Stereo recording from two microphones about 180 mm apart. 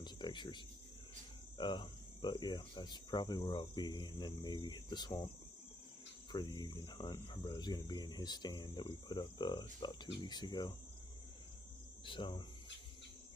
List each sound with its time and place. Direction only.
0.0 s speech: 25° left (ahead or behind)
1.6 s speech: 25° left (ahead or behind)
6.3 s speech: 25° left (ahead or behind)
12.0 s speech: 25° left (ahead or behind)